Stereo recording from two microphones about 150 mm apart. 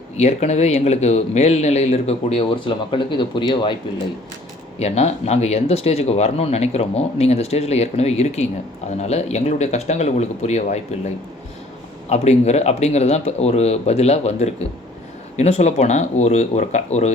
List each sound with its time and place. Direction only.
0.2 s speech: 50° left (ahead or behind)
4.8 s speech: 45° left (ahead or behind)
12.0 s speech: 45° left (ahead or behind)